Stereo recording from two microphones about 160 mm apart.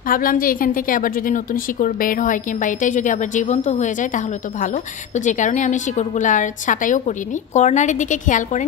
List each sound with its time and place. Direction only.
0.1 s a woman's voice: 60° left (ahead or behind)